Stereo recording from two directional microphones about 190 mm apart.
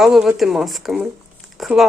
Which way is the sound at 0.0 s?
Centre (ahead or behind).